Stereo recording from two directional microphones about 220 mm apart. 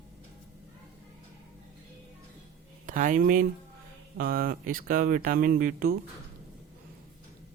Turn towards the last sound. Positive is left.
turn(degrees=-40)  # may be behind; listen again after turning